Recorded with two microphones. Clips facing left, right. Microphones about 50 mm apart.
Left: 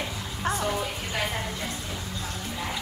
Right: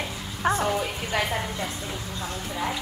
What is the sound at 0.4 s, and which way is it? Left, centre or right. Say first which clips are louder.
Music: right 5 dB; right.